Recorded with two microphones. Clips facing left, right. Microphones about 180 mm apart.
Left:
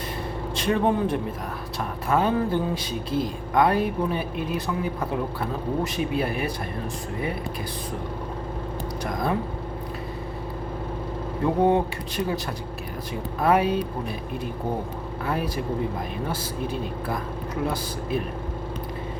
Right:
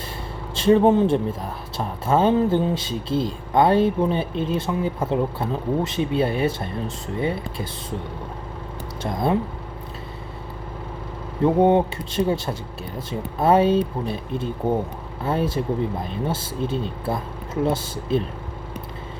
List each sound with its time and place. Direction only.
0.5 s speech: 25° right (ahead or behind)
9.0 s speech: 25° right (ahead or behind)
11.4 s speech: 25° right (ahead or behind)